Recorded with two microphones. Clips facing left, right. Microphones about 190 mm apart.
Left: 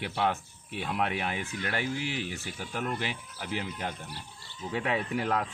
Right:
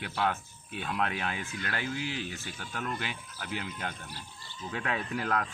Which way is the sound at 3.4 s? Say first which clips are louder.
Left 3 dB; 15° left (ahead or behind).